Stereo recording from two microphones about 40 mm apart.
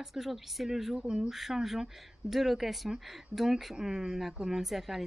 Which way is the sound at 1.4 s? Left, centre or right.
Centre.